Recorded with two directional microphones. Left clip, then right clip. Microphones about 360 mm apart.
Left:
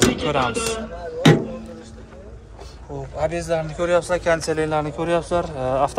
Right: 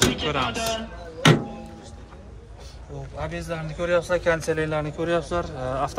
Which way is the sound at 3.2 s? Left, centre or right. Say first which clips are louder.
Left 9 dB; centre.